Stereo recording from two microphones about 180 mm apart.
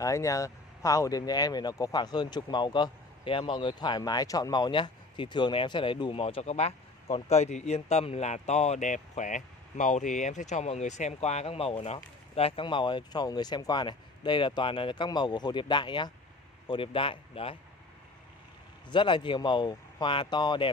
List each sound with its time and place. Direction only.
0.0 s speech: 20° left (ahead or behind)
18.9 s speech: 25° left (ahead or behind)